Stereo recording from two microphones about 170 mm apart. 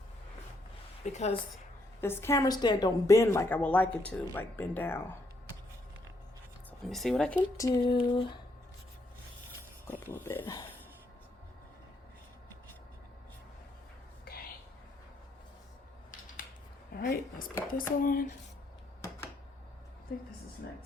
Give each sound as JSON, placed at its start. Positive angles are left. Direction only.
{"t": 1.0, "sound": "speech", "side_deg": 40}
{"t": 2.0, "sound": "a woman's voice", "side_deg": 15}
{"t": 6.7, "sound": "speech", "side_deg": 0}
{"t": 7.5, "sound": "a sound", "side_deg": 20}
{"t": 10.0, "sound": "speech", "side_deg": 15}
{"t": 10.4, "sound": "a sound", "side_deg": 20}
{"t": 14.3, "sound": "whispering", "side_deg": 65}
{"t": 16.9, "sound": "a sound", "side_deg": 60}
{"t": 17.7, "sound": "speech", "side_deg": 55}